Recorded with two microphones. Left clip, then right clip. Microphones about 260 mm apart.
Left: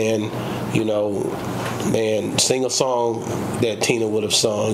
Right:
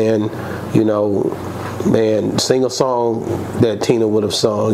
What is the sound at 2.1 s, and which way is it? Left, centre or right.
Speech, right.